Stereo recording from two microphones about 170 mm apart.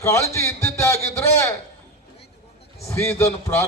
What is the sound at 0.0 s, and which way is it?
Speech, 15° left (ahead or behind).